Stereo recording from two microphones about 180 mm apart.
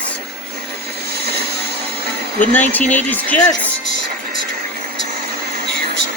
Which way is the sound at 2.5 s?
10° left (ahead or behind).